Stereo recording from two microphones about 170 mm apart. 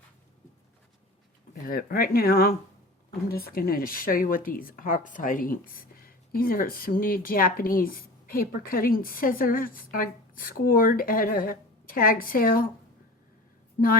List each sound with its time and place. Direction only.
1.6 s speech: 60° left (ahead or behind)